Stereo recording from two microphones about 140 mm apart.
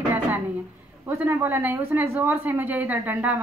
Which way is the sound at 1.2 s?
15° right (ahead or behind).